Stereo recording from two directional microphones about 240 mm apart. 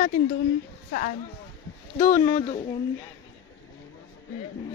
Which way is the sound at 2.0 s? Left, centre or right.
Left.